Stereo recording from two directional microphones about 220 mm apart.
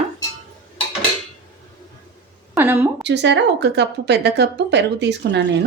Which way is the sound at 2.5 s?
10° right (ahead or behind).